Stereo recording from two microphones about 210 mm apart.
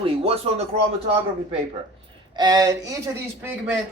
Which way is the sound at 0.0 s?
25° right (ahead or behind).